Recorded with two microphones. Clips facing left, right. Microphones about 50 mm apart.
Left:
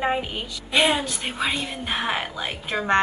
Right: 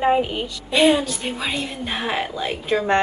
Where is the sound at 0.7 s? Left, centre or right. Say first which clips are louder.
Right 4 dB; left.